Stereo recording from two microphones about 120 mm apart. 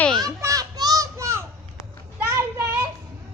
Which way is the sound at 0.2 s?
30° right (ahead or behind).